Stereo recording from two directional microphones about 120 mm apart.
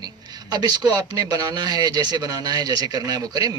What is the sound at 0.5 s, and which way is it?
Speech, 35° right (ahead or behind).